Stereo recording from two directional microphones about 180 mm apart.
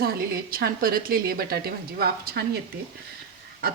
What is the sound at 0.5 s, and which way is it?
A woman's voice, 55° right (ahead or behind).